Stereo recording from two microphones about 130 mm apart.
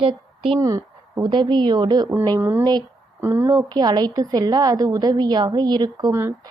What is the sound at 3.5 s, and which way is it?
A woman's voice, 35° right (ahead or behind).